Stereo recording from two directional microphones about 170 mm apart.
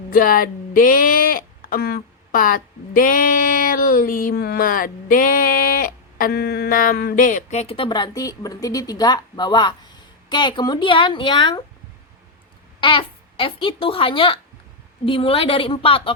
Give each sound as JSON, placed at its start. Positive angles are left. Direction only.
{"t": 0.1, "sound": "speech", "side_deg": 55}
{"t": 12.8, "sound": "a woman's voice", "side_deg": 30}